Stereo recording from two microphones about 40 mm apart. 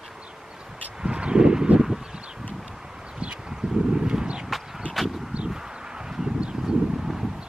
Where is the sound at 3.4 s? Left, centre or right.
Centre.